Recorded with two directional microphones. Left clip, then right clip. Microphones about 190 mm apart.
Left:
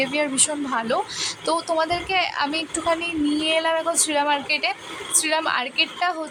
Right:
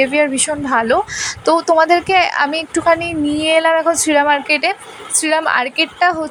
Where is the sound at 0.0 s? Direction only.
20° right (ahead or behind).